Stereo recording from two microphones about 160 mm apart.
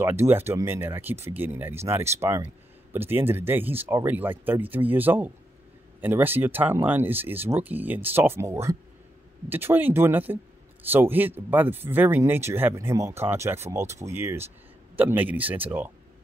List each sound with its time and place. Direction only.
0.0 s speech: 15° right (ahead or behind)